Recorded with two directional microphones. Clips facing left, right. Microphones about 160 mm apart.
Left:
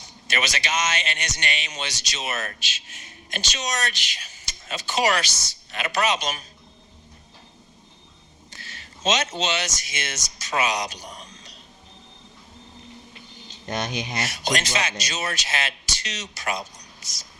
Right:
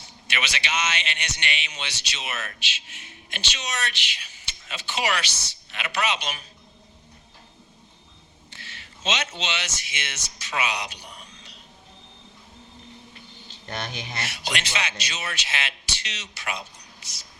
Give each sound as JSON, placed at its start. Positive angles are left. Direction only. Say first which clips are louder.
{"t": 0.3, "sound": "a man's voice", "louder": "left 3 dB", "side_deg": 40}
{"t": 8.4, "sound": "speech", "louder": "left 2 dB", "side_deg": 40}
{"t": 13.5, "sound": "speech", "louder": "left 5 dB", "side_deg": 20}
{"t": 14.2, "sound": "a man's voice", "louder": "left 5 dB", "side_deg": 45}